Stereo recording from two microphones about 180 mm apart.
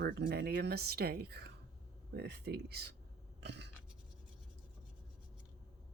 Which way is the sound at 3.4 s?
70° right (ahead or behind).